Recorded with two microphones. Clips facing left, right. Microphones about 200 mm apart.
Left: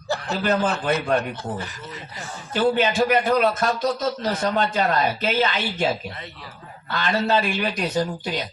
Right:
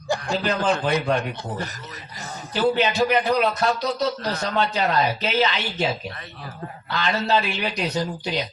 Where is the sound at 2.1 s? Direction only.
40° right (ahead or behind).